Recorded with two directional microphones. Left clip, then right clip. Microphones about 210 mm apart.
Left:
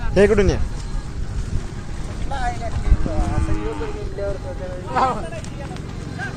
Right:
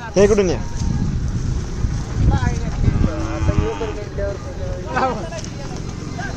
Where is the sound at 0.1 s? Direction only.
5° left (ahead or behind).